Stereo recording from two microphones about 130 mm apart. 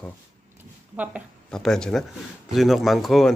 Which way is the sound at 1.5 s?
5° left (ahead or behind).